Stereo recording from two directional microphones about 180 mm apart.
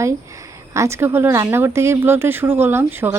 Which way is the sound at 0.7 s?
15° right (ahead or behind).